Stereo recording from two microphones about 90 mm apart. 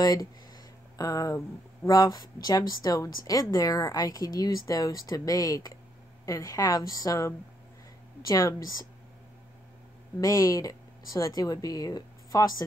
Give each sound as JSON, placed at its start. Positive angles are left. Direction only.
{"t": 0.0, "sound": "a woman's voice", "side_deg": 40}
{"t": 10.2, "sound": "speech", "side_deg": 40}